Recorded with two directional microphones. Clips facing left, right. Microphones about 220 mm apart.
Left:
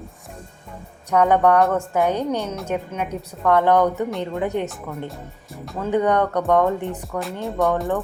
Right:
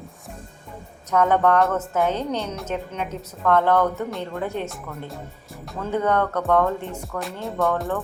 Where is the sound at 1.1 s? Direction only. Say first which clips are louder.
Left 2 dB; 10° left (ahead or behind).